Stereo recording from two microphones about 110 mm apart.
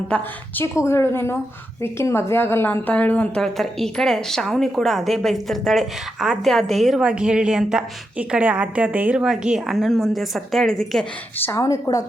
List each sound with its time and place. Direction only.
0.1 s a woman's voice: 20° left (ahead or behind); by 11.0 s 5° left (ahead or behind)
11.3 s a woman's voice: 20° left (ahead or behind)
11.6 s a woman's voice: 30° left (ahead or behind)